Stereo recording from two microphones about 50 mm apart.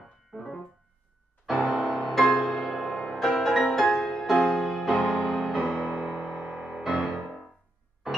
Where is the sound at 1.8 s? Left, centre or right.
Centre.